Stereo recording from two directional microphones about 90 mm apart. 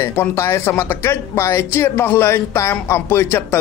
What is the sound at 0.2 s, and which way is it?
Speech, 30° left (ahead or behind).